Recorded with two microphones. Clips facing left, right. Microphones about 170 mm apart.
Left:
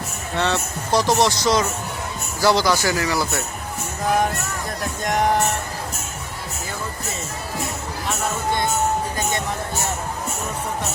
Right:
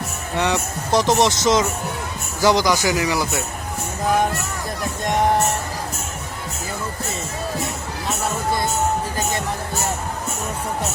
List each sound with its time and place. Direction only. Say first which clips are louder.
0.3 s speech: right 1 dB; 15° right (ahead or behind)
5.0 s speech: right 1 dB; centre (ahead or behind)